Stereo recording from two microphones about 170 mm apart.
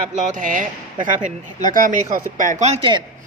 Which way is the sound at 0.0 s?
45° right (ahead or behind).